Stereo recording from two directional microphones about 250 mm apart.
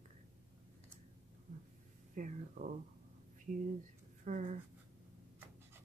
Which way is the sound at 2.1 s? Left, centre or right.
Right.